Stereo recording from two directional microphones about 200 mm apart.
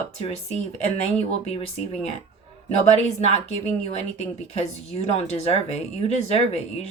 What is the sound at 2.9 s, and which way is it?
Speech, 35° left (ahead or behind).